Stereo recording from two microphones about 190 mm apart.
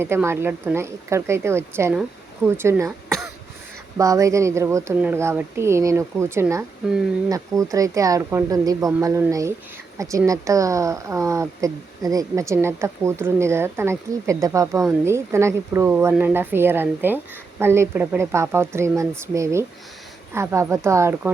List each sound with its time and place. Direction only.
0.0 s speech: 15° right (ahead or behind)
3.9 s speech: 15° right (ahead or behind)